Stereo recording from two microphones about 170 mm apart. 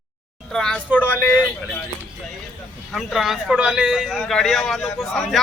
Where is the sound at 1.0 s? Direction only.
10° left (ahead or behind).